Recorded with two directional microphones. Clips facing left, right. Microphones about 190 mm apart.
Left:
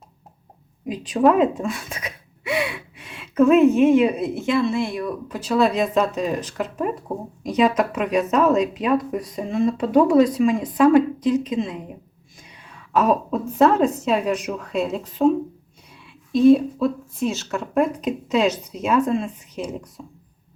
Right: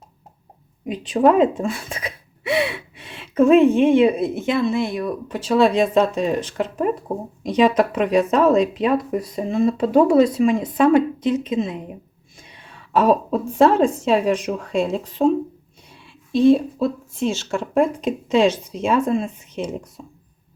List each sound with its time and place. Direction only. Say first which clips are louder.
0.9 s speech: right 1 dB; 25° right (ahead or behind)
12.9 s speech: right 2 dB; 30° right (ahead or behind)